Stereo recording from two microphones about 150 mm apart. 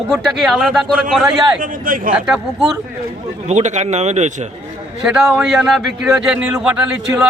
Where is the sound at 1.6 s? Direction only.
70° right (ahead or behind).